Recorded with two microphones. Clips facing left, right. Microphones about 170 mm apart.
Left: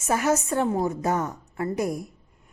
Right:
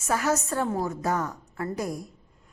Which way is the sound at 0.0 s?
20° left (ahead or behind).